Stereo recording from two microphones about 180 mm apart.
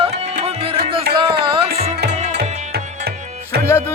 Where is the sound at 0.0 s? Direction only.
30° right (ahead or behind).